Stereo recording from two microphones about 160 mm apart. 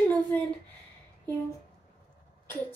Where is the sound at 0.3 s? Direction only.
10° left (ahead or behind).